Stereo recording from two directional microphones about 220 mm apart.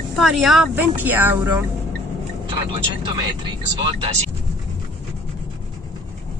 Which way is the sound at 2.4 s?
25° right (ahead or behind).